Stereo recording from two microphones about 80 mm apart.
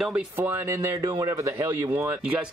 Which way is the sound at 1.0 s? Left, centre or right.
Right.